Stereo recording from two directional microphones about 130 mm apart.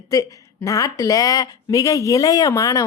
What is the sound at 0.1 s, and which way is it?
Speech, 25° left (ahead or behind).